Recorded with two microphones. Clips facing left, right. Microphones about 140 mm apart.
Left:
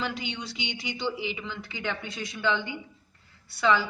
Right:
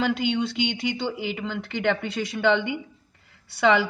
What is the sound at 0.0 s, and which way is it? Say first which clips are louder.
A woman's voice: right 10 dB; 65° right (ahead or behind).